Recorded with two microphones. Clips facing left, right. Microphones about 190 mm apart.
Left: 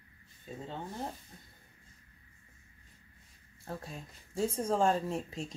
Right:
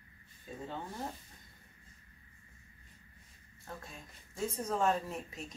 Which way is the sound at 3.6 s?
35° left (ahead or behind).